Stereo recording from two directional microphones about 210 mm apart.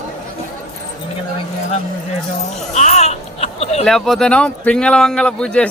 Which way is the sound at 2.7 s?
35° left (ahead or behind).